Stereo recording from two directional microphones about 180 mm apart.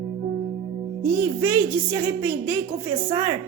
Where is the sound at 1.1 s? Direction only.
10° right (ahead or behind).